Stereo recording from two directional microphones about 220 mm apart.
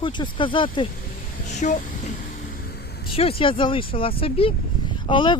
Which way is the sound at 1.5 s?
35° left (ahead or behind).